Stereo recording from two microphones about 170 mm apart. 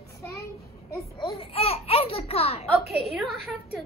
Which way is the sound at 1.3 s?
35° left (ahead or behind).